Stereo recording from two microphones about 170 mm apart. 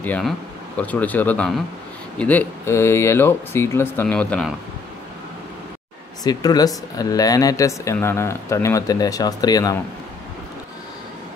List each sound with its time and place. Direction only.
0.0 s speech: 10° left (ahead or behind)
6.2 s speech: 20° left (ahead or behind)